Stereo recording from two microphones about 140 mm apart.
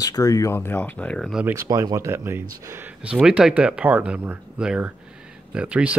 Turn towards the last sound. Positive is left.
turn(degrees=-10)  # may be behind; listen again after turning